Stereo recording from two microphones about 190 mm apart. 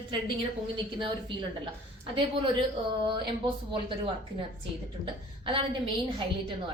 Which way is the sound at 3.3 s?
25° right (ahead or behind).